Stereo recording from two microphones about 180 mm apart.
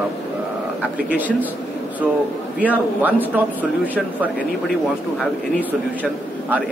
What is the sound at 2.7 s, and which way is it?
Speech, 10° right (ahead or behind).